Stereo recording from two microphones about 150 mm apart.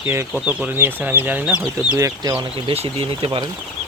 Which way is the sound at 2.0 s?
20° right (ahead or behind).